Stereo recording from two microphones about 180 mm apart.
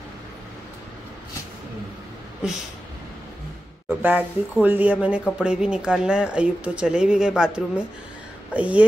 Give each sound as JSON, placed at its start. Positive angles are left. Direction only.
{"t": 4.0, "sound": "speech", "side_deg": -10}